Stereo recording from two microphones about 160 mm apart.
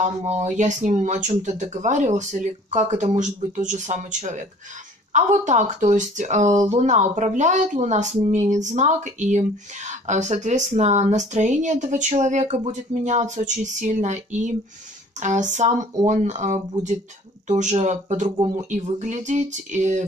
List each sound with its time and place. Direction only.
0.0 s speech: 45° right (ahead or behind)